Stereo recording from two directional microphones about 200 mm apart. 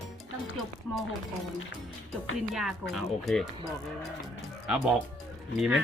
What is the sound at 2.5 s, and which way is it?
Speech, centre (ahead or behind).